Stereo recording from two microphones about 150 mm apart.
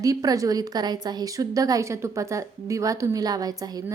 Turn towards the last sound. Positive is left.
turn(degrees=-25)  # may be behind; listen again after turning